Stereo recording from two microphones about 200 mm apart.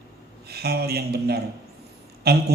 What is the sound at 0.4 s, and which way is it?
Speech, 50° right (ahead or behind).